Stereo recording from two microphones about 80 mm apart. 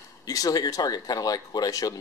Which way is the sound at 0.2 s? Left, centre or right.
Left.